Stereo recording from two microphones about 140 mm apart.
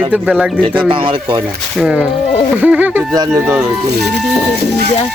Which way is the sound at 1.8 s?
5° right (ahead or behind).